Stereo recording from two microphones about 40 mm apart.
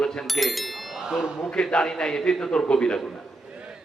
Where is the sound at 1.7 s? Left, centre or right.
Centre.